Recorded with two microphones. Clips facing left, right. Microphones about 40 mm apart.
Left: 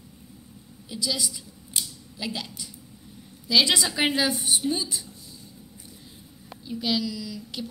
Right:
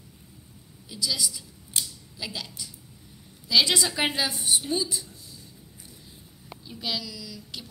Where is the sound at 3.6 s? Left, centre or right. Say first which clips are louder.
Left 1 dB; left.